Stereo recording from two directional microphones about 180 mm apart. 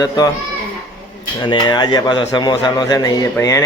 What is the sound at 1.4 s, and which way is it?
A man's voice, 25° left (ahead or behind).